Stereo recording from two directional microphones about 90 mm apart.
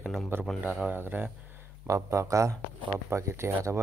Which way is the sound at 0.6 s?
15° right (ahead or behind).